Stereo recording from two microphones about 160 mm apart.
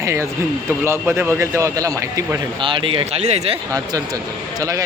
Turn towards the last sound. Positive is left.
turn(degrees=-20)  # may be behind; listen again after turning